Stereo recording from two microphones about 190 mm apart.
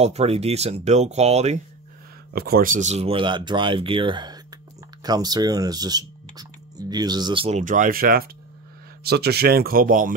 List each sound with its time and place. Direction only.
0.0 s speech: 35° right (ahead or behind)
2.3 s speech: 55° right (ahead or behind); by 7.6 s 30° right (ahead or behind)
7.6 s speech: 45° right (ahead or behind)